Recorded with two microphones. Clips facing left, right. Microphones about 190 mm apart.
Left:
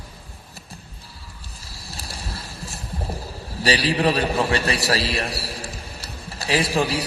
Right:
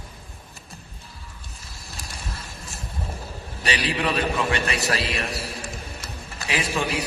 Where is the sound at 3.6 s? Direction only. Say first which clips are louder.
Left 6 dB; 35° left (ahead or behind).